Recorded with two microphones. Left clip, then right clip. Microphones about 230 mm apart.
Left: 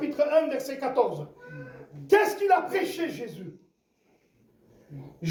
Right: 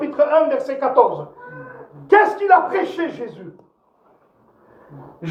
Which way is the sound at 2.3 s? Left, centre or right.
Left.